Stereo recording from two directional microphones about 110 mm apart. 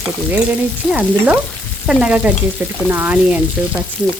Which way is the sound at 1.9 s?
10° right (ahead or behind).